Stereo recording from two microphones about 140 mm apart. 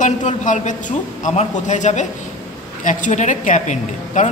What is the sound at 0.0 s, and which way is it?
A woman's voice, 60° left (ahead or behind).